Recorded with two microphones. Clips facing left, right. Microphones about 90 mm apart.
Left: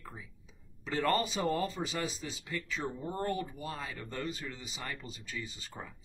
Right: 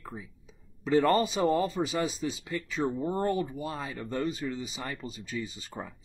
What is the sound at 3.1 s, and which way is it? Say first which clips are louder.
Speech: right 6 dB; 20° right (ahead or behind).